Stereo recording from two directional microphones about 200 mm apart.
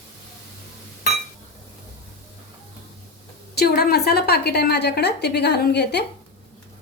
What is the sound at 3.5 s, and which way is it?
A woman's voice, 50° left (ahead or behind).